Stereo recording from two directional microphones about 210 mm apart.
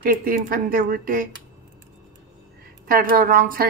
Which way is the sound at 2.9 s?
40° right (ahead or behind).